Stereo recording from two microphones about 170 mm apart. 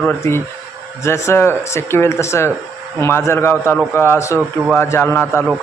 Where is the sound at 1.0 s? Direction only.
15° left (ahead or behind).